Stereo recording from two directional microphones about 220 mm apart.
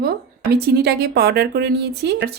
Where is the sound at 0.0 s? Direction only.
45° right (ahead or behind).